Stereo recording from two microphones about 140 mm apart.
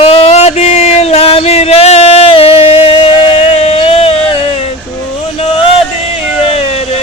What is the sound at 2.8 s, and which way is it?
Music, 45° left (ahead or behind).